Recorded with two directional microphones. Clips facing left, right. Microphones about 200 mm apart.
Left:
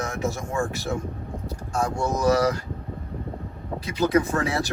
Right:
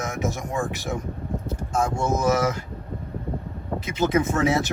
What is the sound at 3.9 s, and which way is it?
Speech, 20° right (ahead or behind).